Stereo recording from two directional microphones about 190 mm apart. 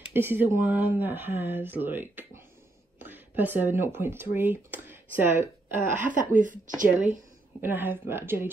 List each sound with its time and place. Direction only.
0.1 s speech: 10° right (ahead or behind)
5.9 s speech: 40° right (ahead or behind)
7.6 s speech: 10° right (ahead or behind)